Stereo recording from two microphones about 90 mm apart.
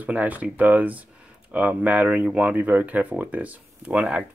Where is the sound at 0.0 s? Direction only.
15° right (ahead or behind).